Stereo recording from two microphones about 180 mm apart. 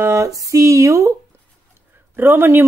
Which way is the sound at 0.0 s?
15° right (ahead or behind).